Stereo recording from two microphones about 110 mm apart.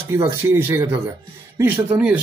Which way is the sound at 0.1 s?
20° right (ahead or behind).